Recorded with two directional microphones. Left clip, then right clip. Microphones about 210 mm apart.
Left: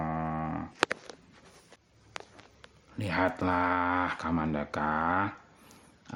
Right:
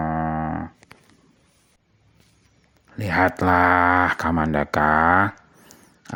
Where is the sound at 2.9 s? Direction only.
35° right (ahead or behind).